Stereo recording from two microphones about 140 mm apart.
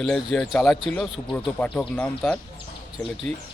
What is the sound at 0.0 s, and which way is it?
Speech, 5° left (ahead or behind).